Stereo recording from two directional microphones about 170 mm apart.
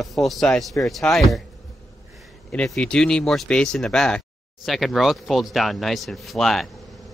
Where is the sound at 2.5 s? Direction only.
5° left (ahead or behind).